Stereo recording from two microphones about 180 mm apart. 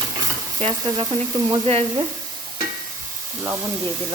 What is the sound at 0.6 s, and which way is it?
Stir, 30° right (ahead or behind).